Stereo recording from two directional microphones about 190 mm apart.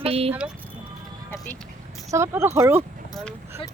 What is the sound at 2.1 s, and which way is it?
Speech, 15° right (ahead or behind).